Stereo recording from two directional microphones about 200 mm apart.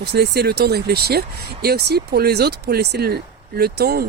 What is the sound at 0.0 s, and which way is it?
Speech, 55° right (ahead or behind).